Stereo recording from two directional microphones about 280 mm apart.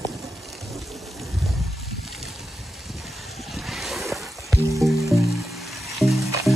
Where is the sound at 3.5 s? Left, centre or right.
Centre.